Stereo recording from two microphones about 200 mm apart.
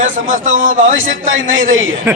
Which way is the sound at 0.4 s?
70° right (ahead or behind).